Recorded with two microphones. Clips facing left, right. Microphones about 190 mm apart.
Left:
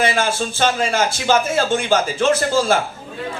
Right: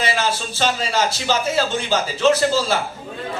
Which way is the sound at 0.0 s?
50° left (ahead or behind).